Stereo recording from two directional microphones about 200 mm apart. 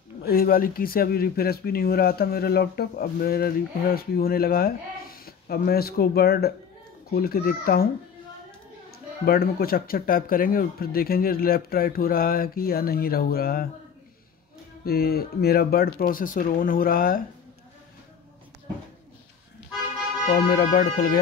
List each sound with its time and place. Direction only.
0.2 s speech: 50° left (ahead or behind)
9.2 s speech: 50° left (ahead or behind)
14.9 s speech: 50° left (ahead or behind)
20.2 s speech: 50° left (ahead or behind)